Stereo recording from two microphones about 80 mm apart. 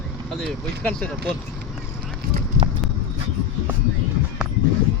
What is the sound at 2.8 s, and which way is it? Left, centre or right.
Clip-clop, centre.